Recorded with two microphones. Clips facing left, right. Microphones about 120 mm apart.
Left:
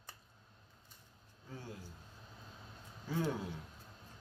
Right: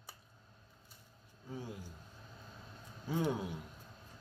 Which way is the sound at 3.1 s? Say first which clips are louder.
Right 2 dB; 15° right (ahead or behind).